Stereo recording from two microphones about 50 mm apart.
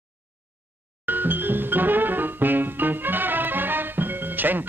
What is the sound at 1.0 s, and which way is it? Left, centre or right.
Music, right.